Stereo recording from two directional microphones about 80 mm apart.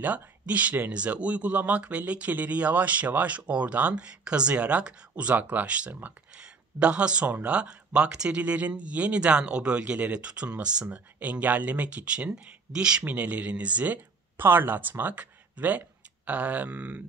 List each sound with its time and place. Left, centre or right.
0.0 s speech: centre